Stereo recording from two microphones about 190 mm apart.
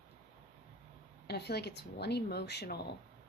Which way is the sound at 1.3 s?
60° left (ahead or behind).